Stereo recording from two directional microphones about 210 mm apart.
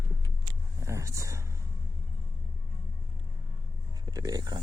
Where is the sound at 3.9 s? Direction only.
15° right (ahead or behind).